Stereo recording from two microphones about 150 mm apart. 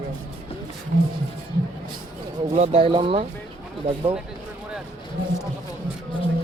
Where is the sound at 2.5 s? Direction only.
45° right (ahead or behind).